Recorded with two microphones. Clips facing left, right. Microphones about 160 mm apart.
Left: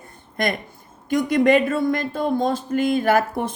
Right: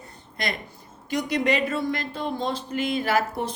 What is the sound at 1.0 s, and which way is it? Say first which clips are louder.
Speech: left 7 dB; 50° left (ahead or behind).